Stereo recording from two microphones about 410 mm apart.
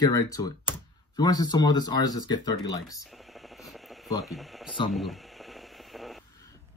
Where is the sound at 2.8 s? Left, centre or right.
Centre.